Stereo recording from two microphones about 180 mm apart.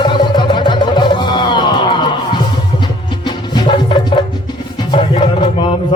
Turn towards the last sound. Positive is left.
turn(degrees=30)  # may be behind; listen again after turning